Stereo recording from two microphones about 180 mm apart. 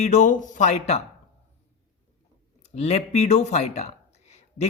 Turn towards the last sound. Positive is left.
turn(degrees=35)  # may be behind; listen again after turning